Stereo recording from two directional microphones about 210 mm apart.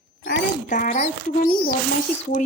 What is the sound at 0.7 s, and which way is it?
Speech, 35° left (ahead or behind).